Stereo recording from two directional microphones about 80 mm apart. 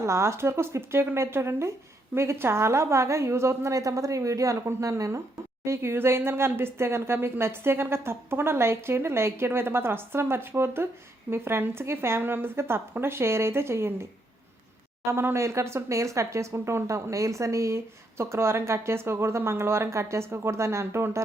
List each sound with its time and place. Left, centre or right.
0.0 s speech: right